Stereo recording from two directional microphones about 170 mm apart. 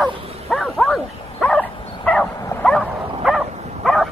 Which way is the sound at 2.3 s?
20° left (ahead or behind).